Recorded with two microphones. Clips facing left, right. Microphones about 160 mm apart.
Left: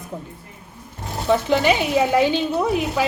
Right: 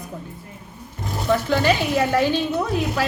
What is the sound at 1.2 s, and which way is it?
A woman's voice, 15° left (ahead or behind).